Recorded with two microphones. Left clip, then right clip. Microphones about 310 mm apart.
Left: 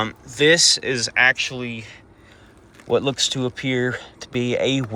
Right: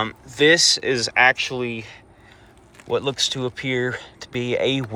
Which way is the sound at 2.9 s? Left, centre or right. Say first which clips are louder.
Left 2 dB; centre.